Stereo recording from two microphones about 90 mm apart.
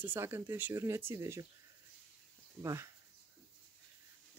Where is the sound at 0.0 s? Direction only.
25° right (ahead or behind).